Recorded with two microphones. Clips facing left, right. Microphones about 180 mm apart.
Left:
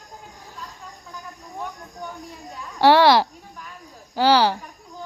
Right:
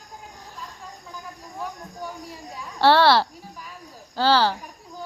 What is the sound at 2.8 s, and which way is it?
A woman's voice, 15° left (ahead or behind).